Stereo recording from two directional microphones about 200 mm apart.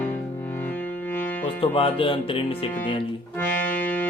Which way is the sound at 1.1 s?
10° left (ahead or behind).